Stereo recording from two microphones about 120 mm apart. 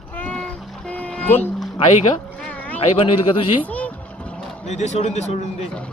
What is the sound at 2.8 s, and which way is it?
Speech, 50° left (ahead or behind).